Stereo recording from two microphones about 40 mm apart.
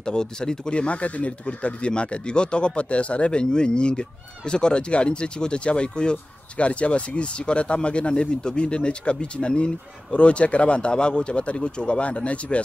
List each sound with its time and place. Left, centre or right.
0.0 s speech: centre